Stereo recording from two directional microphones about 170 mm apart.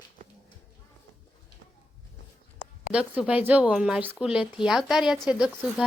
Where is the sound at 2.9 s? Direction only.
5° right (ahead or behind).